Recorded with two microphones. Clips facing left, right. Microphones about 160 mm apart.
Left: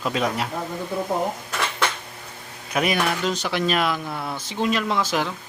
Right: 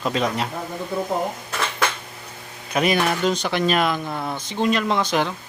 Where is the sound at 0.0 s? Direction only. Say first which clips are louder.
Right 1 dB; 5° left (ahead or behind).